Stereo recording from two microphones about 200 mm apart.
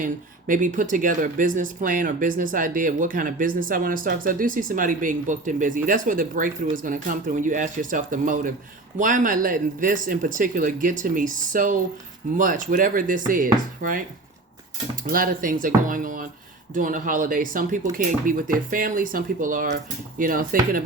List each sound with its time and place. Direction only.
0.0 s speech: 40° right (ahead or behind)
15.0 s speech: 45° right (ahead or behind)